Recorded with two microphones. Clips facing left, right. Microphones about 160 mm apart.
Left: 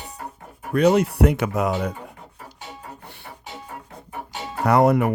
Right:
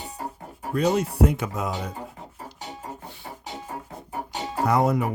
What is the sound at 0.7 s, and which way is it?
Speech, 70° left (ahead or behind).